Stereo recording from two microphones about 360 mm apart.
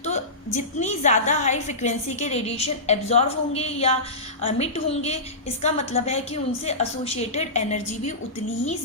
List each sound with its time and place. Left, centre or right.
0.0 s a woman's voice: centre